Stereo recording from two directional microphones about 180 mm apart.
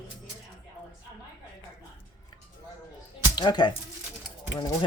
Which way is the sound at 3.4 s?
25° left (ahead or behind).